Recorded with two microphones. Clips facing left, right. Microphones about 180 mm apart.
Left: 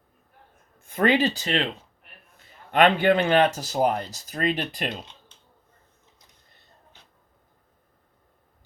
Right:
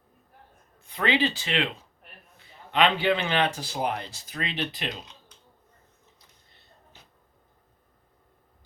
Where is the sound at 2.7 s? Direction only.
50° left (ahead or behind).